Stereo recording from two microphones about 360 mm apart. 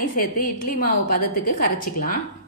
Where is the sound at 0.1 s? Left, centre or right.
Left.